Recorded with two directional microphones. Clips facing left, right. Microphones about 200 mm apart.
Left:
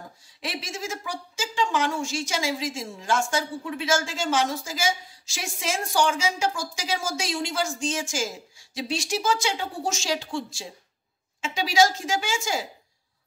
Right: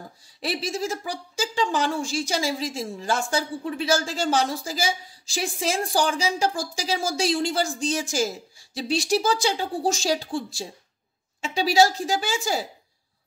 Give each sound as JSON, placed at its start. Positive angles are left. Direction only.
{"t": 0.2, "sound": "a woman's voice", "side_deg": -35}